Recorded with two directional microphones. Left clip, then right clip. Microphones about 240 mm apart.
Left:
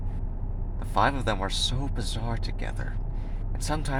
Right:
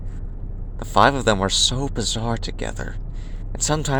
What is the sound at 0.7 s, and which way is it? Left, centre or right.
Speech, right.